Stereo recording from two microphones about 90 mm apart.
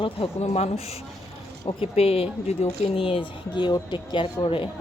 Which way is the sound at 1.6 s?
90° left.